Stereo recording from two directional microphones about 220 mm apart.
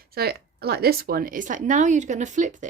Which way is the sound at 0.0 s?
45° right (ahead or behind).